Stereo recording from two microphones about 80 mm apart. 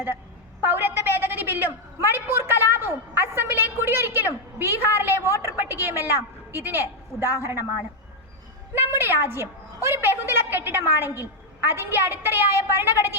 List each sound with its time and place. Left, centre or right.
0.6 s a sound: right
5.4 s a woman's voice: right
8.7 s a woman's voice: right